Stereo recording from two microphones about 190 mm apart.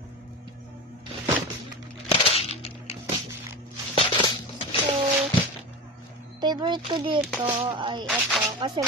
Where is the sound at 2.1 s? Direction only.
30° left (ahead or behind).